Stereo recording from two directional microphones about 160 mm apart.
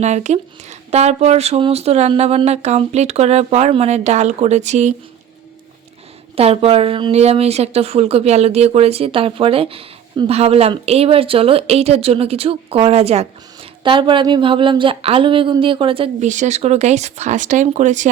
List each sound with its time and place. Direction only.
0.0 s speech: 45° right (ahead or behind)
6.3 s speech: 35° right (ahead or behind)
16.2 s speech: 50° right (ahead or behind)